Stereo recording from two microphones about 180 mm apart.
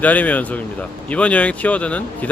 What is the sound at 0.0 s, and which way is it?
Speech, 10° left (ahead or behind).